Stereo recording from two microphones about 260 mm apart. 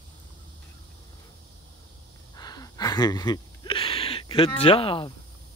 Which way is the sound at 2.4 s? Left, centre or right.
Centre.